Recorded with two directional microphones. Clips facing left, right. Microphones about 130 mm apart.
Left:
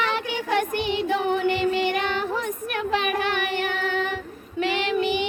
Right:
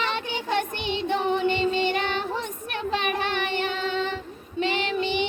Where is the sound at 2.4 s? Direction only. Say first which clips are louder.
Left 4 dB; 25° right (ahead or behind).